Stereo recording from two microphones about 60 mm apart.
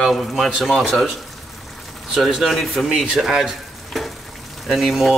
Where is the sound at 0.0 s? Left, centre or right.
Centre.